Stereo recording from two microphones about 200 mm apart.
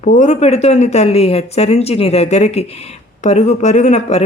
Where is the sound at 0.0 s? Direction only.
35° left (ahead or behind).